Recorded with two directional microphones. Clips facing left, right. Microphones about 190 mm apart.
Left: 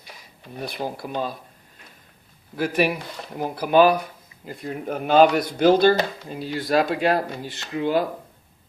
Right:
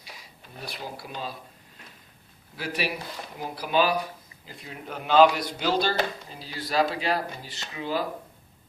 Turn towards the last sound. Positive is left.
turn(degrees=55)  # may be behind; listen again after turning